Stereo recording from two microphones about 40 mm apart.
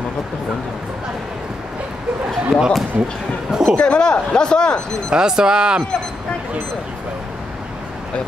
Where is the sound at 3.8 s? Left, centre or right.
Left.